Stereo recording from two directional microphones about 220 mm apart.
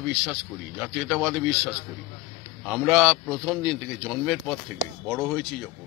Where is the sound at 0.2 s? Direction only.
Centre (ahead or behind).